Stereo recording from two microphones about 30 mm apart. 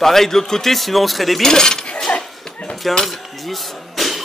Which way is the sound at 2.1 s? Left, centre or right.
Left.